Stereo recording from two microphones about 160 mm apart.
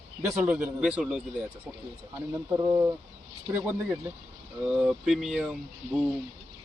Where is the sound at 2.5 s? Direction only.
20° right (ahead or behind); by 6.1 s centre (ahead or behind).